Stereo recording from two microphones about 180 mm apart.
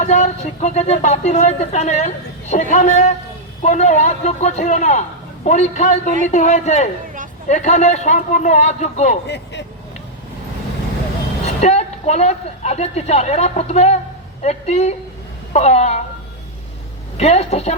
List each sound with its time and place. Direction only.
0.0 s speech: 40° left (ahead or behind)
9.2 s speech: 75° left (ahead or behind)
11.6 s speech: 40° left (ahead or behind)
17.2 s speech: 35° left (ahead or behind)